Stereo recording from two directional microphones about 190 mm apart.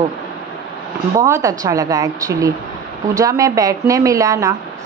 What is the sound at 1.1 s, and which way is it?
Speech, 15° right (ahead or behind).